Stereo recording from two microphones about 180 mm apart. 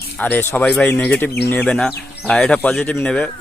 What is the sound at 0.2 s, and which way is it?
Speech, 10° left (ahead or behind).